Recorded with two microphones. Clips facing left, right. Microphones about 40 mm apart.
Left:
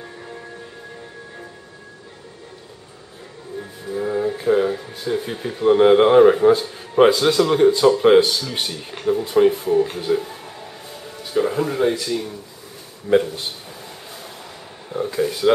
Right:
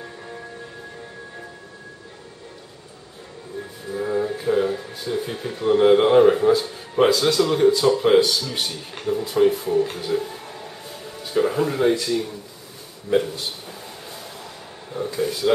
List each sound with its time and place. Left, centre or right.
0.0 s a sound: centre
3.8 s speech: centre
13.1 s speech: centre
14.9 s speech: centre